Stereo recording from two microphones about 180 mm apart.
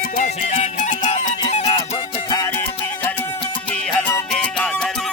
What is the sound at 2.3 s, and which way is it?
Music, 15° left (ahead or behind).